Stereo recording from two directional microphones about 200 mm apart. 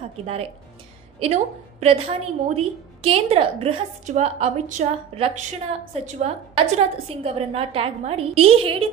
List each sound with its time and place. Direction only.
0.2 s a woman's voice: 30° right (ahead or behind)